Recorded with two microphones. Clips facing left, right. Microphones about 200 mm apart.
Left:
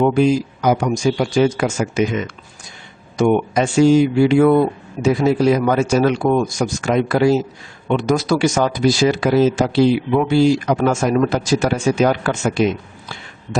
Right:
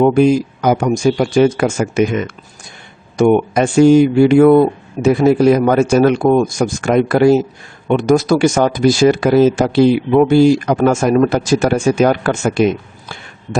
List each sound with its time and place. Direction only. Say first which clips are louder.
0.0 s speech: right 4 dB; 55° right (ahead or behind)